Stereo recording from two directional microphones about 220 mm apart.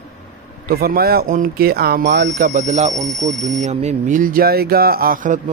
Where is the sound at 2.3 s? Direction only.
35° right (ahead or behind).